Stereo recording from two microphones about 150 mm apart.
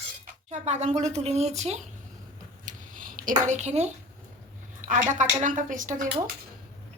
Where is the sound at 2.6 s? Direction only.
65° right (ahead or behind).